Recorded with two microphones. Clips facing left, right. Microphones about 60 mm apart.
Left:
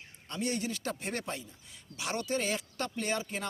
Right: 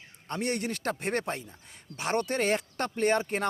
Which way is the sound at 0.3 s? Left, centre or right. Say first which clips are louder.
Right 3 dB; right.